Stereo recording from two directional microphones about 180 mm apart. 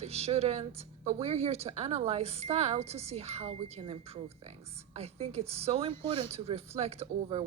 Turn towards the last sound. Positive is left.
turn(degrees=-35)  # may be behind; listen again after turning